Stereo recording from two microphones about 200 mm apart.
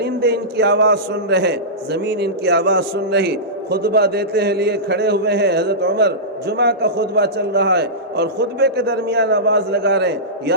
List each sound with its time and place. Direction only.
0.0 s a man's voice: 55° right (ahead or behind)